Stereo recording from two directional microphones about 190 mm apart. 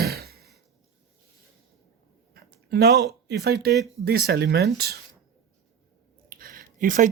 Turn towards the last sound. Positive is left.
turn(degrees=-45)  # may be behind; listen again after turning